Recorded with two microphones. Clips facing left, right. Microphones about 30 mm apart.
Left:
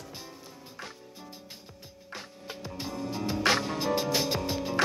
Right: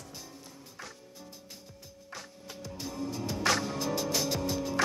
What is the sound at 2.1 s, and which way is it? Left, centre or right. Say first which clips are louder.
Music: left 3 dB; left.